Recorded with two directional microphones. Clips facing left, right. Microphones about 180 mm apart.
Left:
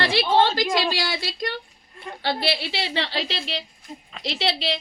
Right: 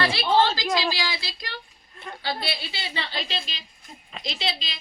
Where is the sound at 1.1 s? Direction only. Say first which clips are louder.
Left 8 dB; 50° left (ahead or behind).